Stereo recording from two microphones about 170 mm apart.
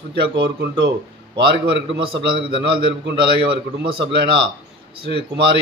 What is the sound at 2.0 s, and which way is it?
Speech, 30° right (ahead or behind).